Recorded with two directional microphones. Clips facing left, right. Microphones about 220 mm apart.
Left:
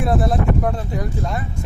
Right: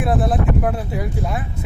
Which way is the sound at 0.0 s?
Centre (ahead or behind).